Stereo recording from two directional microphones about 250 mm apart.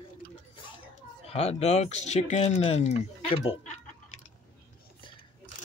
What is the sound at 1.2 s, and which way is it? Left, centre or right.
Speech, left.